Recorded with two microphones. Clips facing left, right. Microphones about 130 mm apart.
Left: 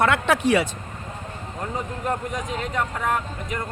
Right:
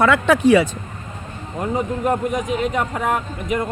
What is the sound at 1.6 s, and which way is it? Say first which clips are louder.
Speech: right 7 dB; 15° right (ahead or behind).